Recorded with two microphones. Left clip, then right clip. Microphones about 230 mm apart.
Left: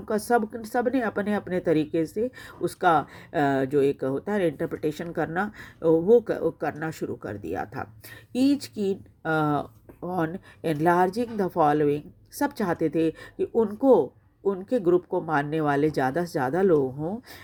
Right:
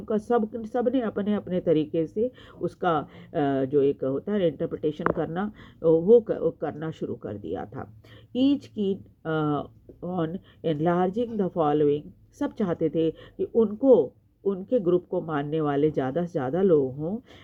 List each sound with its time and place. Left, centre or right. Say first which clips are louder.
0.0 s speech: left 1 dB; left
5.1 s speech: left 2 dB; left
6.2 s speech: even; left
6.7 s speech: left 1 dB; left